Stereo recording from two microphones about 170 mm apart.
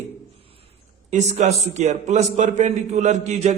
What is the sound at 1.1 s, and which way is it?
A man's voice, 40° right (ahead or behind).